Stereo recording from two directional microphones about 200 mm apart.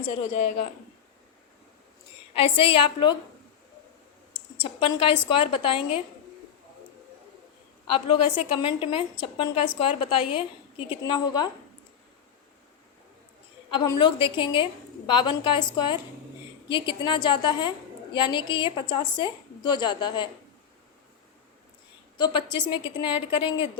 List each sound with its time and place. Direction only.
2.3 s a woman's voice: 25° left (ahead or behind)
4.4 s a woman's voice: 25° left (ahead or behind)
7.9 s a woman's voice: 25° left (ahead or behind)
13.7 s a woman's voice: 25° left (ahead or behind)
22.2 s a woman's voice: 25° left (ahead or behind)